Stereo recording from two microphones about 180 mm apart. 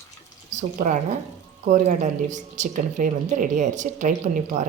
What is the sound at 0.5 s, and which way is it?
Speech, 40° right (ahead or behind).